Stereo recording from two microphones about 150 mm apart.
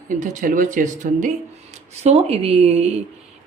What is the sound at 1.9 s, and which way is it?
Speech, 45° right (ahead or behind).